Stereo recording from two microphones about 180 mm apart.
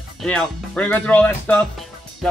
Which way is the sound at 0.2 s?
5° left (ahead or behind).